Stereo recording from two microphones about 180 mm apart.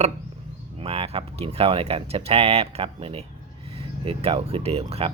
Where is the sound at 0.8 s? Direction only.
30° right (ahead or behind).